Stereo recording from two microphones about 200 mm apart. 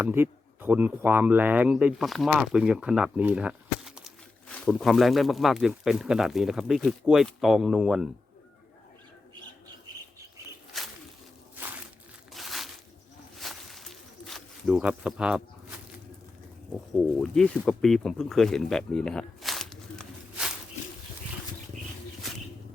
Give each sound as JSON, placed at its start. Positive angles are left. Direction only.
{"t": 0.0, "sound": "speech", "side_deg": -10}
{"t": 10.7, "sound": "a sound", "side_deg": 0}
{"t": 12.3, "sound": "a sound", "side_deg": 0}
{"t": 13.3, "sound": "snake", "side_deg": 0}
{"t": 16.7, "sound": "speech", "side_deg": 0}
{"t": 21.7, "sound": "bird", "side_deg": -40}